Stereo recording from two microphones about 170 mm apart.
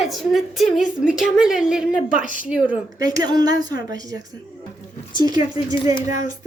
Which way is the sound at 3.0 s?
20° right (ahead or behind).